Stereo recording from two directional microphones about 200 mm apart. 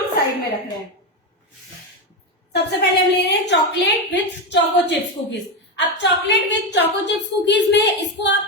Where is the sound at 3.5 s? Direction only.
60° left (ahead or behind).